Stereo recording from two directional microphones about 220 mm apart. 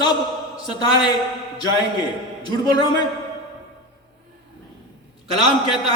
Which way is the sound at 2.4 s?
20° left (ahead or behind).